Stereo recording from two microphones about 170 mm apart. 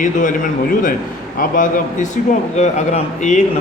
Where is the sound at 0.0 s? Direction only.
50° left (ahead or behind).